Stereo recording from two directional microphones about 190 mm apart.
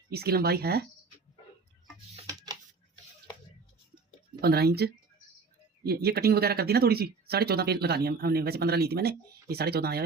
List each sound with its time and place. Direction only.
0.1 s speech: 55° right (ahead or behind)
2.2 s a sound: 20° right (ahead or behind)
4.4 s speech: 55° right (ahead or behind)